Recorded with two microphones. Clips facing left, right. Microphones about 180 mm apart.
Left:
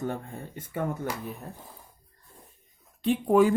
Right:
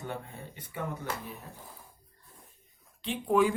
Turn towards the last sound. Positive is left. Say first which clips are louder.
# left 5 dB
turn(degrees=45)  # may be behind; listen again after turning